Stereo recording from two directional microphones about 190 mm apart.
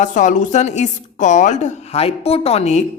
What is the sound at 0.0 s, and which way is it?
A woman's voice, 40° left (ahead or behind).